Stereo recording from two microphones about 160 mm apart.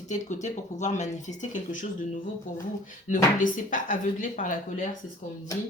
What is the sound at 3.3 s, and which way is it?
Speech, 55° left (ahead or behind).